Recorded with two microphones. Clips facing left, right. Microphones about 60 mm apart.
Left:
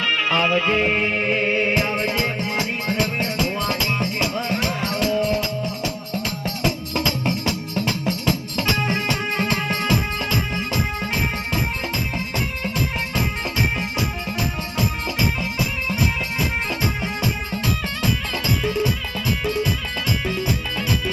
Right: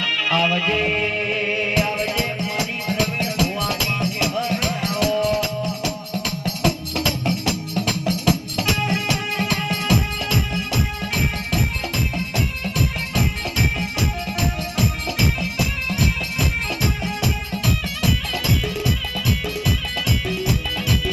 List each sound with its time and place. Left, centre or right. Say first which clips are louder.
0.0 s music: left 1 dB; left
6.4 s music: right 4 dB; left
8.9 s music: even; left
18.6 s music: left 4 dB; left